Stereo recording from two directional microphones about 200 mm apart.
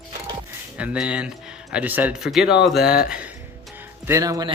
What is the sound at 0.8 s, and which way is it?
Speech, 5° right (ahead or behind).